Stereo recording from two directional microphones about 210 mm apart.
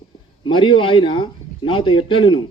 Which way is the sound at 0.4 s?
25° left (ahead or behind).